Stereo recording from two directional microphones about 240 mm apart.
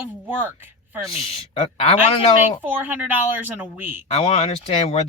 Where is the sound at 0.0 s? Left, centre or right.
Centre.